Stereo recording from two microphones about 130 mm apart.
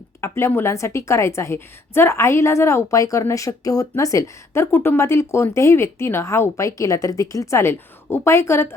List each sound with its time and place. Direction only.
0.2 s a woman's voice: 20° left (ahead or behind)